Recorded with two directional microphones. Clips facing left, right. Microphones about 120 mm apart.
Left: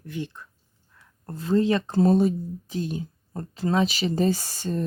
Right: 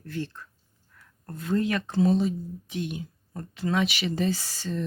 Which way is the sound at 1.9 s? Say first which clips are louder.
Left 2 dB; 45° left (ahead or behind).